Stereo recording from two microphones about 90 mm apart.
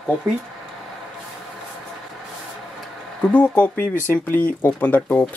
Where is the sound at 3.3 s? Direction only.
15° left (ahead or behind).